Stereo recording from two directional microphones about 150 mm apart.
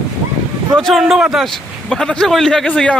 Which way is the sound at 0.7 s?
Centre (ahead or behind).